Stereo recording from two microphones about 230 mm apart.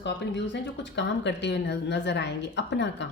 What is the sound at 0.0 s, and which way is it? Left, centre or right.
Speech, left.